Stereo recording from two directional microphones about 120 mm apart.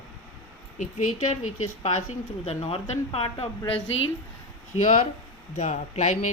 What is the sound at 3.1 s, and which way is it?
Speech, 55° left (ahead or behind).